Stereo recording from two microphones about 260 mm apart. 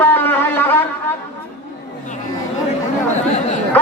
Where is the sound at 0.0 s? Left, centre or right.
Centre.